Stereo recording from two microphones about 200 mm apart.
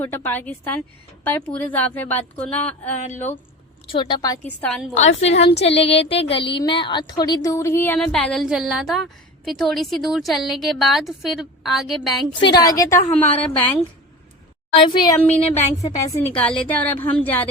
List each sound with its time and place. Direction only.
0.0 s speech: 10° left (ahead or behind)
3.0 s a woman's voice: 35° left (ahead or behind)
3.9 s speech: 25° left (ahead or behind)
4.6 s a woman's voice: 5° left (ahead or behind)
4.9 s a woman's voice: 35° left (ahead or behind)
5.4 s a woman's voice: 60° left (ahead or behind)
6.1 s a woman's voice: 30° left (ahead or behind); by 12.2 s centre (ahead or behind)
12.3 s speech: 25° left (ahead or behind); by 13.7 s 10° left (ahead or behind)
14.8 s speech: 20° left (ahead or behind)
15.4 s a woman's voice: 30° left (ahead or behind)
15.8 s speech: 15° left (ahead or behind)